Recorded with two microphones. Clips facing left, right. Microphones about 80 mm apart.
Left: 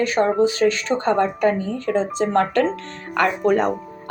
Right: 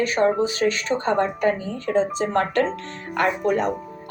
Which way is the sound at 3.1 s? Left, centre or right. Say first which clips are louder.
Left 3 dB; left.